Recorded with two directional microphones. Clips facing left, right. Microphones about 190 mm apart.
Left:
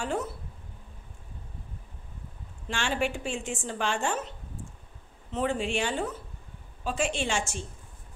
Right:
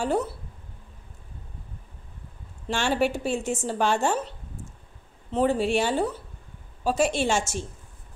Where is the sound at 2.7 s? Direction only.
40° right (ahead or behind).